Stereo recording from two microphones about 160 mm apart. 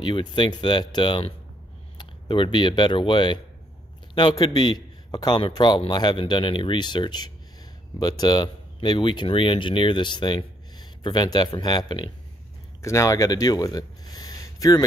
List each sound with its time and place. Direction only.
0.0 s speech: 30° left (ahead or behind)